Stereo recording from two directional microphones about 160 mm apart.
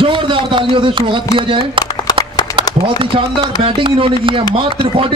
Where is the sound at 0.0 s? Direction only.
30° right (ahead or behind).